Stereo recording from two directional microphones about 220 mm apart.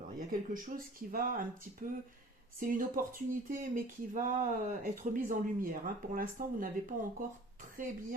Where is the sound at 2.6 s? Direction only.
40° right (ahead or behind).